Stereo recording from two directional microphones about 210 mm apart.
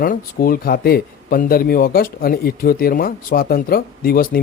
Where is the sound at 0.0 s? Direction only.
45° left (ahead or behind).